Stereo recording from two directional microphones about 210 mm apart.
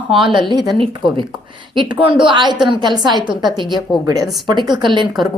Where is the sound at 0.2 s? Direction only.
25° right (ahead or behind).